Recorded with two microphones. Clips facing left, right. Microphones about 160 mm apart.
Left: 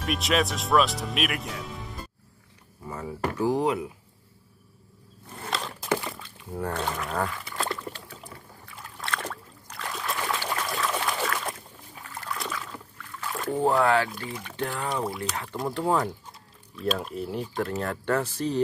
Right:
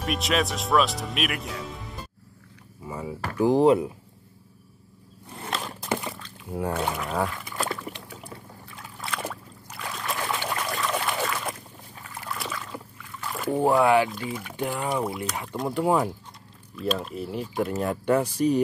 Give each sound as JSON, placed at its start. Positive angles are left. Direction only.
{"t": 0.0, "sound": "speech", "side_deg": 0}
{"t": 2.9, "sound": "speech", "side_deg": -10}
{"t": 3.5, "sound": "speech", "side_deg": -30}
{"t": 5.5, "sound": "a sound", "side_deg": 0}
{"t": 6.5, "sound": "speech", "side_deg": -10}
{"t": 7.5, "sound": "rowboat", "side_deg": -5}
{"t": 9.0, "sound": "trickle", "side_deg": -5}
{"t": 10.5, "sound": "a sound", "side_deg": 0}
{"t": 12.7, "sound": "rowboat", "side_deg": -5}
{"t": 14.1, "sound": "speech", "side_deg": 0}
{"t": 15.7, "sound": "speech", "side_deg": -10}
{"t": 16.7, "sound": "speech", "side_deg": 0}
{"t": 17.6, "sound": "speech", "side_deg": -15}